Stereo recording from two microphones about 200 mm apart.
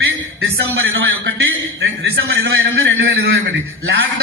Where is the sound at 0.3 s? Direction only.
60° right (ahead or behind).